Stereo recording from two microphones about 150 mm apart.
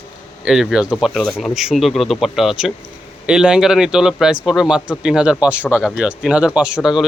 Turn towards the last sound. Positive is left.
turn(degrees=-5)  # may be behind; listen again after turning